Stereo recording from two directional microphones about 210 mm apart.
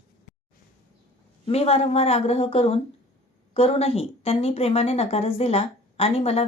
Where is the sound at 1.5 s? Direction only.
30° left (ahead or behind).